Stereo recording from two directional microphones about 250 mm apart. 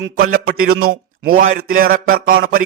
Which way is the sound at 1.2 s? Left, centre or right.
Right.